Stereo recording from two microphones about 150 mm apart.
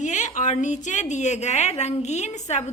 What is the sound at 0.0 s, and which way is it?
A woman's voice, 55° left (ahead or behind).